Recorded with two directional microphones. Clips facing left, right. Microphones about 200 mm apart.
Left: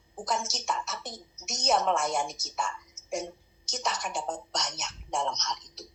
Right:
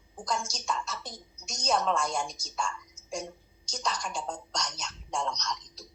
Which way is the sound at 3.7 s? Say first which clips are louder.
Left 1 dB; 20° left (ahead or behind).